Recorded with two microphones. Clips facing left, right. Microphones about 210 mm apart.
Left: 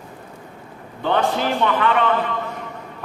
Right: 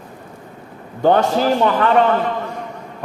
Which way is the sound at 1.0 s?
45° right (ahead or behind).